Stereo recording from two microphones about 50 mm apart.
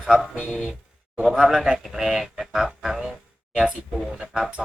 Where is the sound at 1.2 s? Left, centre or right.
Centre.